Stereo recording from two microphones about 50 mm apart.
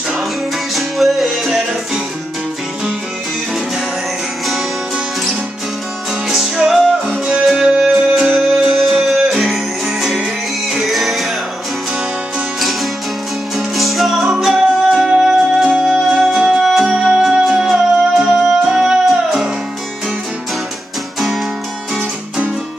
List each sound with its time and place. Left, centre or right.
0.7 s music: centre
6.2 s music: centre
13.6 s music: centre
15.0 s music: centre